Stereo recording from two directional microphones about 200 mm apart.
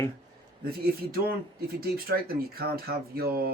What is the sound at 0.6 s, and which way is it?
Speech, 50° right (ahead or behind).